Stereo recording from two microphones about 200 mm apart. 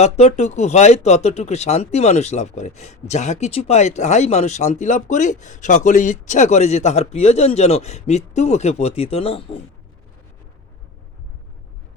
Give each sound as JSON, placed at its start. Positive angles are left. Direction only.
{"t": 0.0, "sound": "speech", "side_deg": 35}